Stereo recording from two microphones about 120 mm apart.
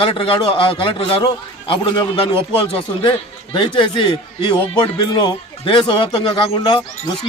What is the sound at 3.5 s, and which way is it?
A man's voice, 40° left (ahead or behind).